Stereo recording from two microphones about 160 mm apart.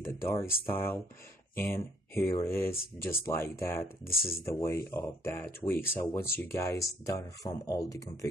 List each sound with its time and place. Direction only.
0.0 s speech: 15° left (ahead or behind)
4.0 s speech: 70° left (ahead or behind)
4.5 s speech: 20° left (ahead or behind)